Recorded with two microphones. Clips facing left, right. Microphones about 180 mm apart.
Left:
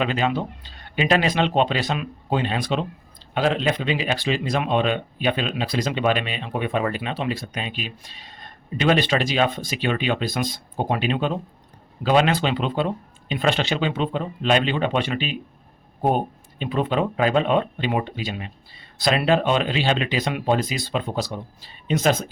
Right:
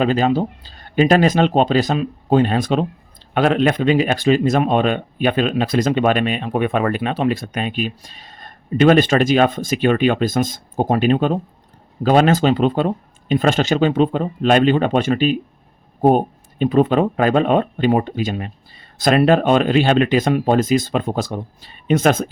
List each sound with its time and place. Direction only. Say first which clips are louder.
0.0 s speech: right 6 dB; 40° right (ahead or behind)
3.3 s speech: right 6 dB; 55° right (ahead or behind)